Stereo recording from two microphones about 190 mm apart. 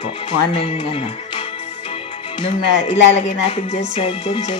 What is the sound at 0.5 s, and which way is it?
Speech, 30° left (ahead or behind).